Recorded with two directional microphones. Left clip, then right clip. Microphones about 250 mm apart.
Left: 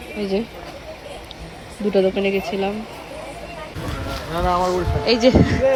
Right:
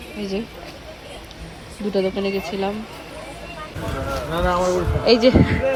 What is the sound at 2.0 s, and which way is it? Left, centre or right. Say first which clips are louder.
Speech: left 3 dB; centre.